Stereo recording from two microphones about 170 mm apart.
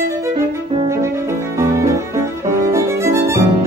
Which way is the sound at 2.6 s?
15° right (ahead or behind).